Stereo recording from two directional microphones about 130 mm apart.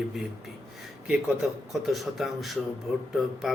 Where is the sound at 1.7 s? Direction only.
Centre (ahead or behind).